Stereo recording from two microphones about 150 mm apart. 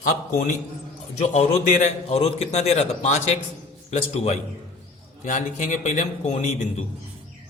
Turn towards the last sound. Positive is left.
turn(degrees=50)  # may be behind; listen again after turning